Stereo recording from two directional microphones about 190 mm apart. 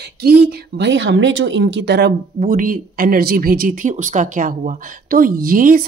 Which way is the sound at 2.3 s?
45° right (ahead or behind).